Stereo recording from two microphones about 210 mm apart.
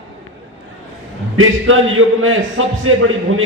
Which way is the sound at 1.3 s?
75° right (ahead or behind).